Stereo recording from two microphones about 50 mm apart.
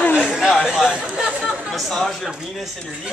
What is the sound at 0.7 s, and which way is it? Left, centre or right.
Chatter, centre.